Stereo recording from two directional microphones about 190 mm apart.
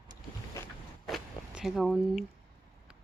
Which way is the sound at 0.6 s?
15° left (ahead or behind).